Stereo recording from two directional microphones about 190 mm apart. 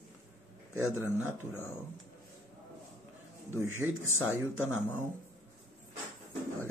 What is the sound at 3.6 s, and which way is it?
Speech, 15° right (ahead or behind).